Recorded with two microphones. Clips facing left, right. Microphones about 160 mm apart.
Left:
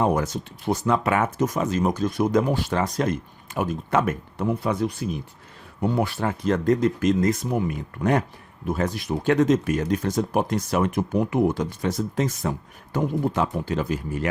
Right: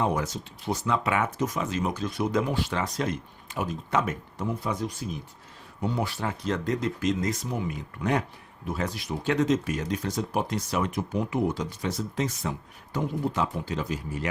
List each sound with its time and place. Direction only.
0.0 s speech: 50° left (ahead or behind)